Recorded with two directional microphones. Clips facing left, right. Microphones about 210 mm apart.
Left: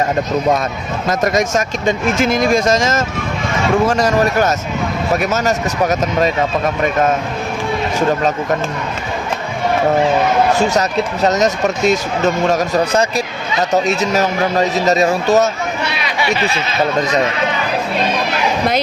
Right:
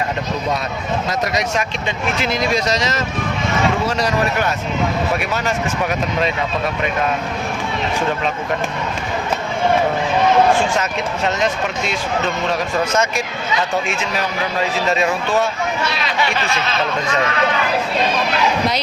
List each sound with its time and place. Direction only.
1.2 s speech: 45° left (ahead or behind)
10.5 s speech: 40° left (ahead or behind)